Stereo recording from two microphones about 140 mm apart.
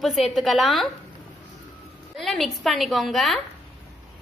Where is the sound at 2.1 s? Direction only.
Centre (ahead or behind).